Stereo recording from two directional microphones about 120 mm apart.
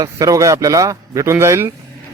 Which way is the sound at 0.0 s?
30° right (ahead or behind).